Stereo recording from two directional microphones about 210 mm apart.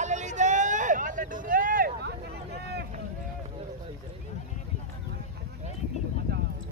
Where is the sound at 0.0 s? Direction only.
35° right (ahead or behind); by 2.8 s 50° right (ahead or behind).